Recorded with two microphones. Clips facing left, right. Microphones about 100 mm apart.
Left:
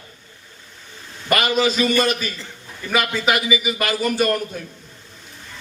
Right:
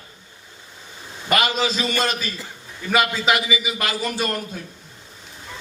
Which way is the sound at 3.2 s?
50° left (ahead or behind).